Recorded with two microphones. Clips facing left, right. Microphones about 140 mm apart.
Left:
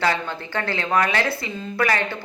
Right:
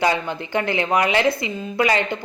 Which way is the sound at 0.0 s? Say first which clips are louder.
Right 2 dB; 15° right (ahead or behind).